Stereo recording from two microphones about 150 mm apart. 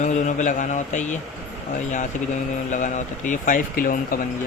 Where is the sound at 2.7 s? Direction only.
55° left (ahead or behind).